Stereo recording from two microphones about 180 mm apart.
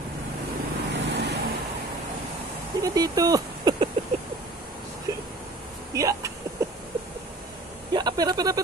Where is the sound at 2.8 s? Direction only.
20° right (ahead or behind).